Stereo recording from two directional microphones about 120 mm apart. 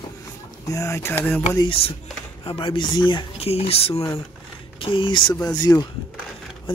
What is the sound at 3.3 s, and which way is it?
Speech, 55° left (ahead or behind).